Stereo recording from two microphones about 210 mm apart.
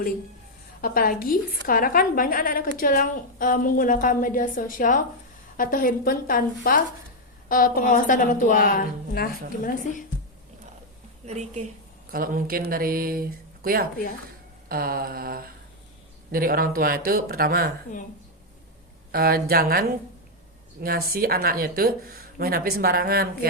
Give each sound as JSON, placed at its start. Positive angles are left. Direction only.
{"t": 0.8, "sound": "a woman's voice", "side_deg": 45}
{"t": 11.3, "sound": "a woman's voice", "side_deg": -30}
{"t": 12.1, "sound": "speech", "side_deg": -45}
{"t": 19.1, "sound": "speech", "side_deg": -45}
{"t": 20.8, "sound": "speech", "side_deg": -45}